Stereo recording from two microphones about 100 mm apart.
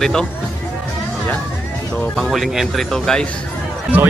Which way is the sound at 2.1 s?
Centre (ahead or behind).